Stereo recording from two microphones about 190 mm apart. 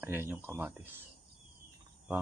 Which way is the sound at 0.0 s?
10° right (ahead or behind).